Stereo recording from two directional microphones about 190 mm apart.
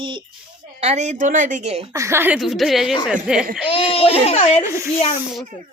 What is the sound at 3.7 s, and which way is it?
Speech, 30° left (ahead or behind).